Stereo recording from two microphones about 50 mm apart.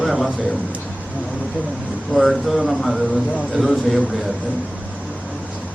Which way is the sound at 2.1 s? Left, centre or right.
Centre.